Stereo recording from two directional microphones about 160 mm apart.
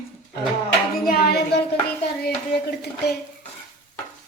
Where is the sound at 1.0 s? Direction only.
70° left (ahead or behind).